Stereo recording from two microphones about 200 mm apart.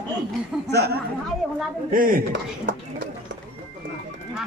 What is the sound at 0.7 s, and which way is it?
Speech, 55° right (ahead or behind).